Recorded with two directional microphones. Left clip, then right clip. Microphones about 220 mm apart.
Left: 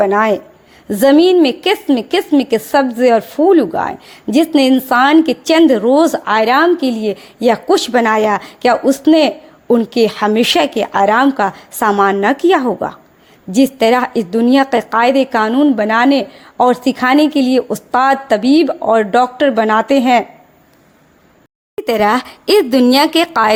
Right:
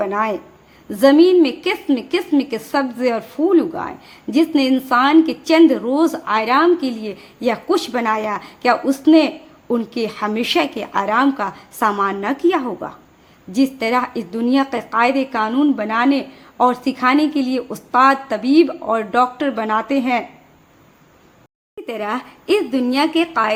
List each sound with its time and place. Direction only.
0.0 s a woman's voice: 35° left (ahead or behind)
21.8 s a woman's voice: 50° left (ahead or behind)